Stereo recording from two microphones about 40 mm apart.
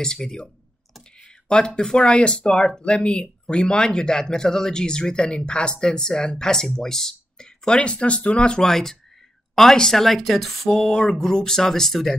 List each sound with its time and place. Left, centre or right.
0.0 s speech: centre
1.2 s a sound: left
1.8 s speech: left
8.5 s speech: centre